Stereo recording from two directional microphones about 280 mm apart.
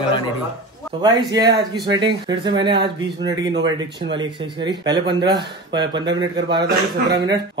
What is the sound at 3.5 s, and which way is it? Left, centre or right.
Speech, right.